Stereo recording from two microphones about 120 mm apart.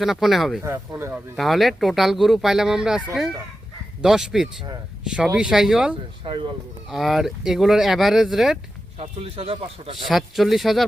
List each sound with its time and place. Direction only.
0.0 s speech: centre (ahead or behind)
0.6 s speech: 20° right (ahead or behind)
1.4 s speech: centre (ahead or behind)
4.0 s speech: 5° right (ahead or behind)
6.2 s speech: 40° right (ahead or behind)
6.9 s speech: centre (ahead or behind)
9.0 s speech: 55° right (ahead or behind)
10.1 s speech: centre (ahead or behind)